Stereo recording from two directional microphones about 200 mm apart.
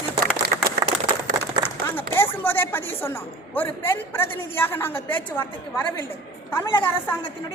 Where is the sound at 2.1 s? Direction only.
10° left (ahead or behind).